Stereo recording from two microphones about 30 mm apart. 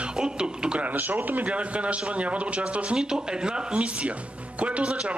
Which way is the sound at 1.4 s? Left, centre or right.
Right.